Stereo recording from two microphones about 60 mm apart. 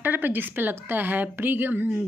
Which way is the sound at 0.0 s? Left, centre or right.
Right.